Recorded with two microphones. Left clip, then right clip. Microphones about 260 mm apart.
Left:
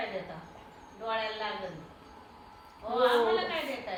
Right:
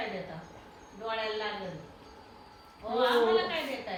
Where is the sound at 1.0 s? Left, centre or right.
Left.